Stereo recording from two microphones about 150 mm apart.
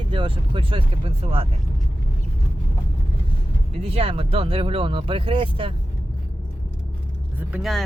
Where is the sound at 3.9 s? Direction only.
40° right (ahead or behind).